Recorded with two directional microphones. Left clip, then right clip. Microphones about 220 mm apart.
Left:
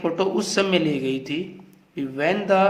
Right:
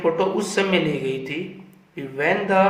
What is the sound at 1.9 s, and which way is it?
Speech, 45° left (ahead or behind).